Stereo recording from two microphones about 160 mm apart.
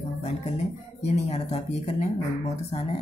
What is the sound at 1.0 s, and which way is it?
Speech, 45° left (ahead or behind).